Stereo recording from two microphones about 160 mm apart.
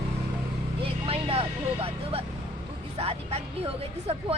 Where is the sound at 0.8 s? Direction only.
35° right (ahead or behind).